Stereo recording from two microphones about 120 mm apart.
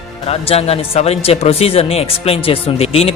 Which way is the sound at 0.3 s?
55° left (ahead or behind).